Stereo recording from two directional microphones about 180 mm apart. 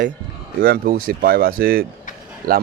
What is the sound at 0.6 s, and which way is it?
Speech, 55° right (ahead or behind).